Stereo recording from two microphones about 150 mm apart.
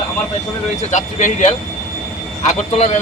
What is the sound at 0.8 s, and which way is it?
Speech, 55° left (ahead or behind).